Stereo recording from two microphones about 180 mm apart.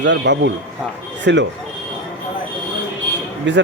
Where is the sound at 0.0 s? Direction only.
75° right (ahead or behind).